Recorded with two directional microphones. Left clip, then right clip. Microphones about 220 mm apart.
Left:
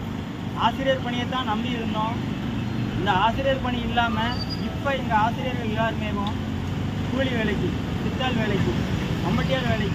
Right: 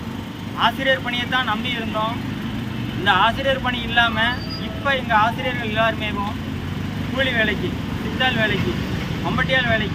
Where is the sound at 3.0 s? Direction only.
5° right (ahead or behind).